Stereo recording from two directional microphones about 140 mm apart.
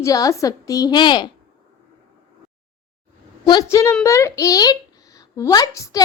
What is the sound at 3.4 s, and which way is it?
A woman's voice, 30° left (ahead or behind).